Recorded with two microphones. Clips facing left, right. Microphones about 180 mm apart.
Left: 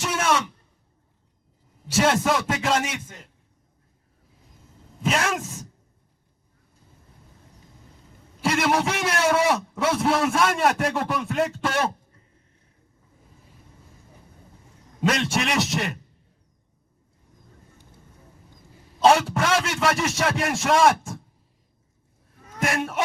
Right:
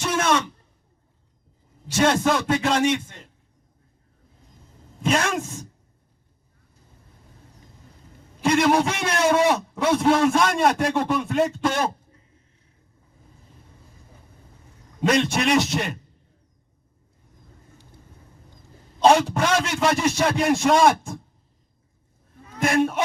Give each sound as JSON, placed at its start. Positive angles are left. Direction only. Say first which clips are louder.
{"t": 0.0, "sound": "a sound", "louder": "right 2 dB", "side_deg": 5}
{"t": 2.0, "sound": "a man's voice", "louder": "right 1 dB", "side_deg": 5}
{"t": 5.0, "sound": "a man's voice", "louder": "right 2 dB", "side_deg": 5}
{"t": 8.4, "sound": "a man's voice", "louder": "right 4 dB", "side_deg": 5}
{"t": 15.0, "sound": "a man's voice", "louder": "right 3 dB", "side_deg": 0}
{"t": 18.9, "sound": "a man's voice", "louder": "right 1 dB", "side_deg": 0}
{"t": 22.5, "sound": "a man's voice", "louder": "right 4 dB", "side_deg": 0}